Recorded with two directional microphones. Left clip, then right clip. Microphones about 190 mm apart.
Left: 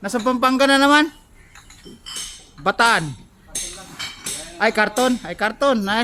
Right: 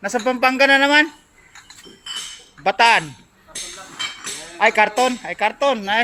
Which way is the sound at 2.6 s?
70° left (ahead or behind).